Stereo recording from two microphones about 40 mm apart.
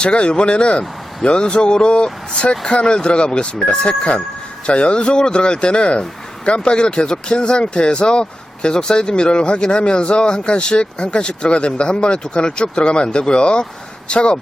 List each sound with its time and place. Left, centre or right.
0.0 s speech: left